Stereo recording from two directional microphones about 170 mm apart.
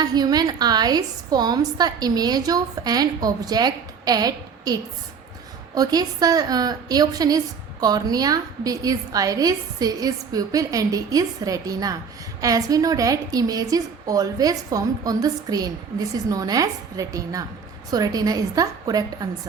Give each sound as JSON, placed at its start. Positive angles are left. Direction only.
{"t": 0.0, "sound": "a woman's voice", "side_deg": -25}